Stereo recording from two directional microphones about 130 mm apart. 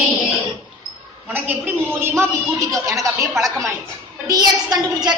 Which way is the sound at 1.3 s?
15° right (ahead or behind).